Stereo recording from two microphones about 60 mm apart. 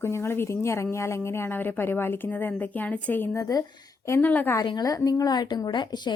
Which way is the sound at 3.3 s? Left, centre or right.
Left.